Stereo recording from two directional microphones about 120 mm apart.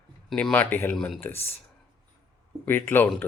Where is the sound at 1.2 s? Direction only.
20° left (ahead or behind).